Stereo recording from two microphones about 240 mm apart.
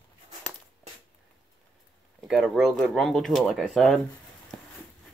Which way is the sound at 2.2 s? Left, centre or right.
Centre.